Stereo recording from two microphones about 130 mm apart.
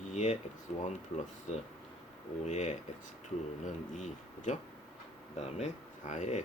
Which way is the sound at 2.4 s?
65° left (ahead or behind).